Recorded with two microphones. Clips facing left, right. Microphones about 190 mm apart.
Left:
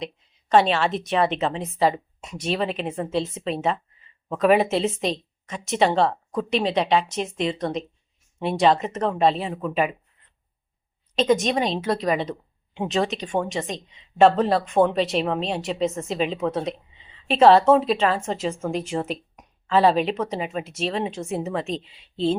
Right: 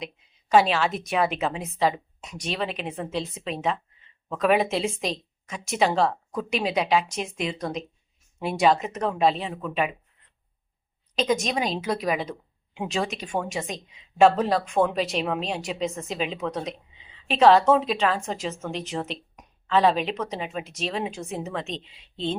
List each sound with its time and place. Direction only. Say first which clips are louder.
0.0 s a woman's voice: left 4 dB; 5° right (ahead or behind)
11.2 s a woman's voice: left 4 dB; centre (ahead or behind)